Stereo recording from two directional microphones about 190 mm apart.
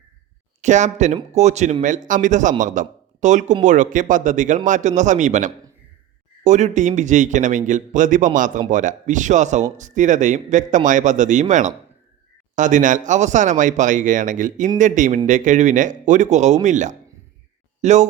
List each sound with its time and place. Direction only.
0.6 s speech: 40° right (ahead or behind)